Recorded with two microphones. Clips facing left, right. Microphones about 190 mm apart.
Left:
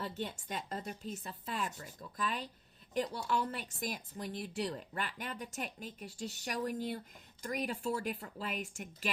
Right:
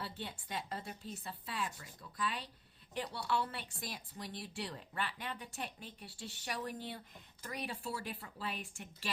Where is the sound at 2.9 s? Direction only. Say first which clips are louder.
Left 3 dB; 40° left (ahead or behind).